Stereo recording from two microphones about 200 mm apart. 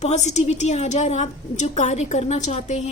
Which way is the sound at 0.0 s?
35° left (ahead or behind).